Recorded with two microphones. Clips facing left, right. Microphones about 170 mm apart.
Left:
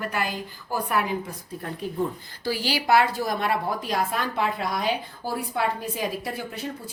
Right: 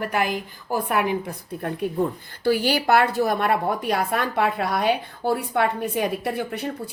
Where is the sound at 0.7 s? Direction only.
55° right (ahead or behind).